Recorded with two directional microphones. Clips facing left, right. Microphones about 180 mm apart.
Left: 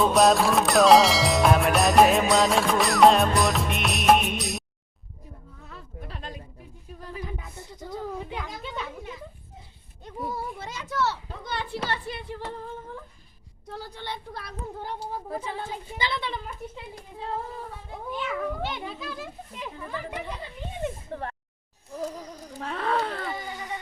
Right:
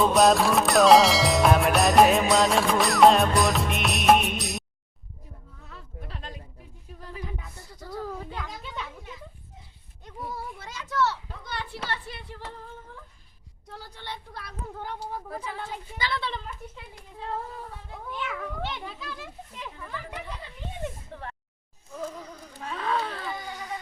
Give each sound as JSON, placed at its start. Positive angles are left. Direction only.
{"t": 0.0, "sound": "music", "side_deg": 0}
{"t": 5.7, "sound": "a sound", "side_deg": 45}
{"t": 7.3, "sound": "a sound", "side_deg": 20}
{"t": 10.0, "sound": "a child's voice", "side_deg": 30}
{"t": 14.3, "sound": "music", "side_deg": 35}
{"t": 14.9, "sound": "speech", "side_deg": 25}
{"t": 18.1, "sound": "speech", "side_deg": 5}
{"t": 19.7, "sound": "speech", "side_deg": 25}
{"t": 21.1, "sound": "speech", "side_deg": 50}
{"t": 21.9, "sound": "music", "side_deg": 35}
{"t": 22.6, "sound": "speech", "side_deg": 55}
{"t": 23.3, "sound": "speech", "side_deg": 20}